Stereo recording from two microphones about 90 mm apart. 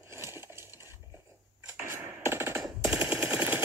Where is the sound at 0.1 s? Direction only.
30° right (ahead or behind).